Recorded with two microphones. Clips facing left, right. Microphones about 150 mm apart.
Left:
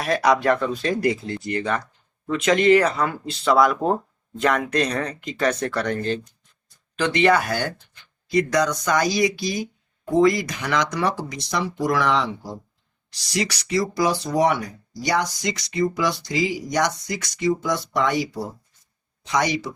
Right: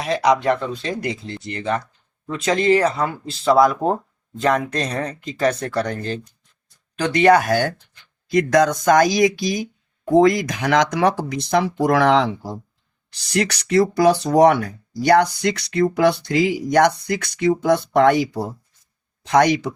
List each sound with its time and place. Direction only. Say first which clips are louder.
0.0 s speech: right 1 dB; 20° right (ahead or behind); by 12.5 s 50° right (ahead or behind)
13.3 s speech: right 6 dB; 65° right (ahead or behind)